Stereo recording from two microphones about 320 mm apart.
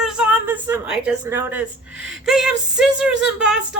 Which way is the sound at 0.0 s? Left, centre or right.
Centre.